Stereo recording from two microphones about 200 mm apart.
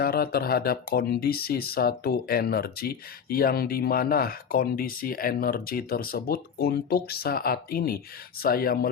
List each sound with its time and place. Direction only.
0.0 s speech: 50° left (ahead or behind)